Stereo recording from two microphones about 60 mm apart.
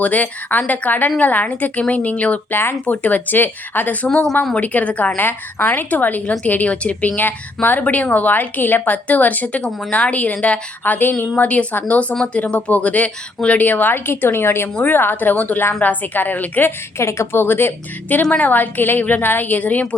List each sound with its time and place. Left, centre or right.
0.0 s speech: left
4.0 s speech: centre
5.2 s a woman's voice: left
17.0 s a woman's voice: left